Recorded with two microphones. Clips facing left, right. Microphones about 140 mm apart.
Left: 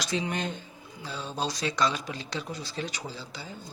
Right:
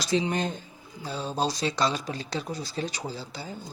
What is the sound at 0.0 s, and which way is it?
Speech, 30° right (ahead or behind).